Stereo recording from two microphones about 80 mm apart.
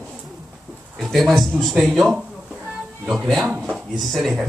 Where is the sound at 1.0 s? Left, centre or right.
Centre.